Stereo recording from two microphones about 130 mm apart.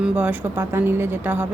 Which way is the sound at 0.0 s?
10° right (ahead or behind).